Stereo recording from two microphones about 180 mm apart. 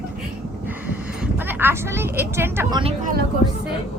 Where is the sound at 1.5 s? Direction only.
10° right (ahead or behind).